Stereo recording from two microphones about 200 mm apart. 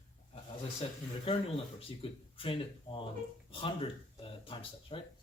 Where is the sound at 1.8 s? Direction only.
25° left (ahead or behind).